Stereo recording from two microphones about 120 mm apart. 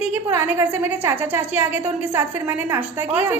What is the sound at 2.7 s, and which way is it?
Speech, 15° right (ahead or behind).